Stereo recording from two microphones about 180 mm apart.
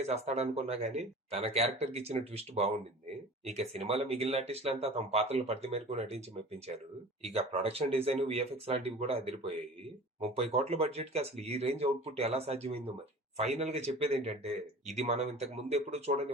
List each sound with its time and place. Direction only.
0.0 s speech: 35° right (ahead or behind)
7.3 s speech: 35° right (ahead or behind)